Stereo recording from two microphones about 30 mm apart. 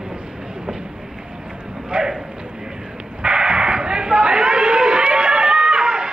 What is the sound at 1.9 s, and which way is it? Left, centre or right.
Clip-clop, right.